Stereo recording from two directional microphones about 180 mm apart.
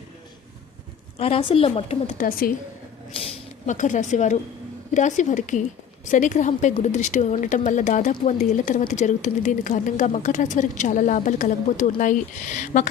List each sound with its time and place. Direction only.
1.2 s a woman's voice: 30° left (ahead or behind); by 2.5 s 50° left (ahead or behind)
3.1 s speech: 30° left (ahead or behind)
3.7 s speech: 45° left (ahead or behind)